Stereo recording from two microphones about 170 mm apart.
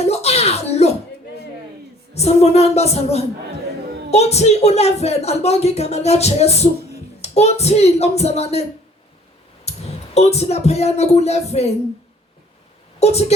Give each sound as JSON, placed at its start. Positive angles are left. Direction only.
{"t": 0.0, "sound": "music", "side_deg": 40}
{"t": 2.1, "sound": "speech", "side_deg": 40}
{"t": 9.6, "sound": "speech", "side_deg": 40}
{"t": 13.0, "sound": "speech", "side_deg": 40}